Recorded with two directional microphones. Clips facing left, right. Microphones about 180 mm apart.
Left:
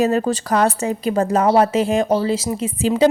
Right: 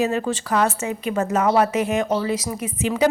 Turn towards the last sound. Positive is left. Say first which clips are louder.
# left 4 dB
turn(degrees=25)  # may be behind; listen again after turning